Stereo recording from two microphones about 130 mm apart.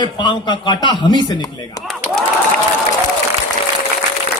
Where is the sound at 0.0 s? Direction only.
35° left (ahead or behind).